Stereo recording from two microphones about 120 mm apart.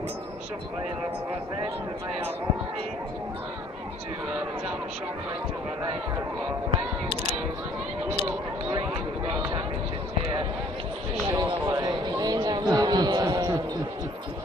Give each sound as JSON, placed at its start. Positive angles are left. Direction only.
{"t": 11.2, "sound": "a man's voice", "side_deg": -35}